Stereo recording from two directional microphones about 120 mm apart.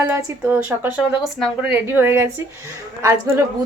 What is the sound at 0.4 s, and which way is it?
A woman's voice, 15° right (ahead or behind).